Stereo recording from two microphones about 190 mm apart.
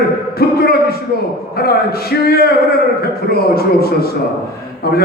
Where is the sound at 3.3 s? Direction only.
55° left (ahead or behind).